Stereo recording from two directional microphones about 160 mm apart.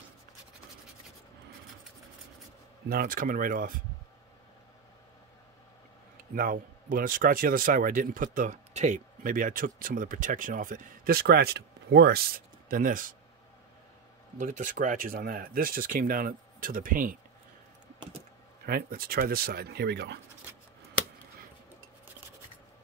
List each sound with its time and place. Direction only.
2.9 s a man's voice: 65° right (ahead or behind)
6.3 s a man's voice: 60° right (ahead or behind)
14.4 s a man's voice: 55° right (ahead or behind)
18.7 s speech: 65° right (ahead or behind); by 20.2 s 90° right